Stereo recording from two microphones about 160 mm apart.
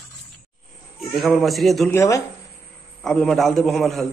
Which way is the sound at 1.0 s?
Centre (ahead or behind).